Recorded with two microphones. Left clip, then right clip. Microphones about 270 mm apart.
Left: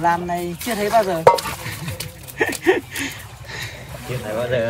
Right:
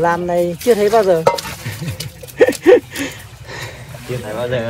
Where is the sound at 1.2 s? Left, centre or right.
Left.